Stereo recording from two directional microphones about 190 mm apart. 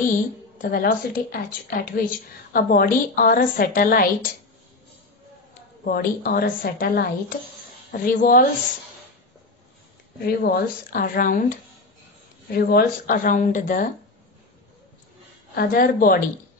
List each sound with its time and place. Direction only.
0.0 s speech: 45° left (ahead or behind)
5.9 s speech: 50° left (ahead or behind)
10.2 s speech: 50° left (ahead or behind)
12.5 s speech: 50° left (ahead or behind)
15.5 s speech: 50° left (ahead or behind)